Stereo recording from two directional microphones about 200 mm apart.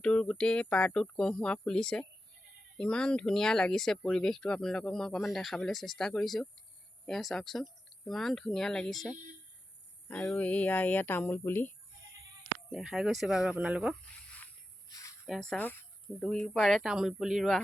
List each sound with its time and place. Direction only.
0.0 s speech: 5° left (ahead or behind)
12.7 s speech: 5° right (ahead or behind)
14.8 s a sound: 15° left (ahead or behind)
15.3 s speech: 5° left (ahead or behind)